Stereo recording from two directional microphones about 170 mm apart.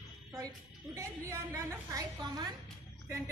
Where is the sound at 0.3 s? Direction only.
20° right (ahead or behind).